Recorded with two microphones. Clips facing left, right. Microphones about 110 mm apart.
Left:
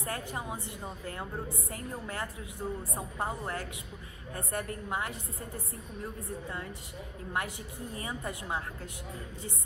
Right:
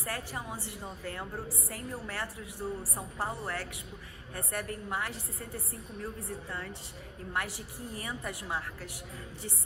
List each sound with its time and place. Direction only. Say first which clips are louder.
0.0 s a woman's voice: left 1 dB; 25° left (ahead or behind)